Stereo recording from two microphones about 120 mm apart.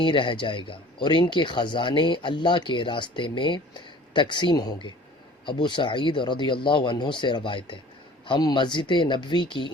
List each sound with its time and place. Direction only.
0.0 s speech: 45° left (ahead or behind)